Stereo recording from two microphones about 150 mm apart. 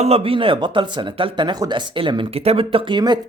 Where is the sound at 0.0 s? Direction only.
40° right (ahead or behind).